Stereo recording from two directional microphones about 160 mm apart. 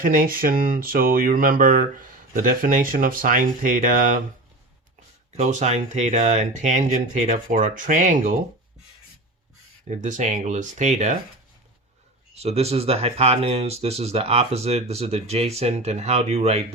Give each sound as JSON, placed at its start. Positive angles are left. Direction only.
{"t": 0.0, "sound": "speech", "side_deg": -60}
{"t": 5.4, "sound": "speech", "side_deg": -50}
{"t": 10.0, "sound": "speech", "side_deg": -50}
{"t": 12.3, "sound": "speech", "side_deg": -40}